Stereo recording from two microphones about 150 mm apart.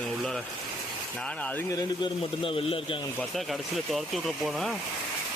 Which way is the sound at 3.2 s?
Centre (ahead or behind).